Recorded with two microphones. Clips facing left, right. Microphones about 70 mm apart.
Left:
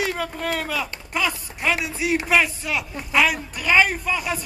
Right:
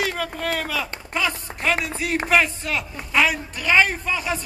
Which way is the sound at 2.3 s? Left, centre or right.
Centre.